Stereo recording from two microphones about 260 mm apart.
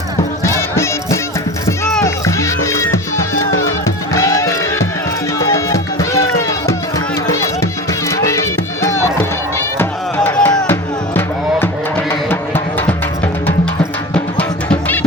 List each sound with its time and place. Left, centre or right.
0.4 s music: centre
3.3 s music: left
3.8 s music: centre
7.3 s music: centre
14.1 s music: centre